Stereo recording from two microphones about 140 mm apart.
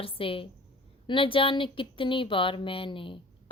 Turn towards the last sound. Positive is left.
turn(degrees=40)  # may be behind; listen again after turning